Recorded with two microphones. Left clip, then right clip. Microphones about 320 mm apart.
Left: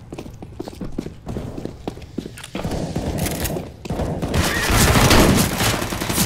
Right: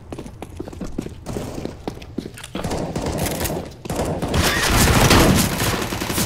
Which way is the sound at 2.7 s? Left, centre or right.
Centre.